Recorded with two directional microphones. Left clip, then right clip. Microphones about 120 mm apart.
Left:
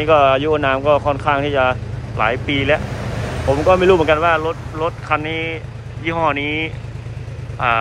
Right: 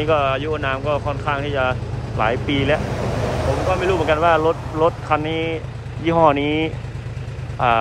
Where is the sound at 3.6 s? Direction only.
5° left (ahead or behind).